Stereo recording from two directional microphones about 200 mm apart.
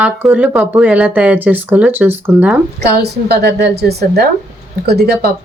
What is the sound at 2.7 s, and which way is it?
A woman's voice, 55° right (ahead or behind).